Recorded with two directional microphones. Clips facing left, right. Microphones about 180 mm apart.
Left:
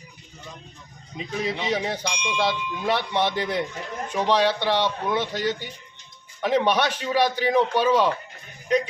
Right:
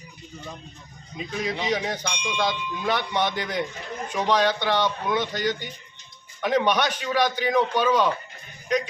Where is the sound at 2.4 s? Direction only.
30° left (ahead or behind).